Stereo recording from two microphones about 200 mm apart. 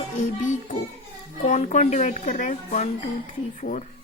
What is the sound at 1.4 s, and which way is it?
A woman's voice, 35° left (ahead or behind).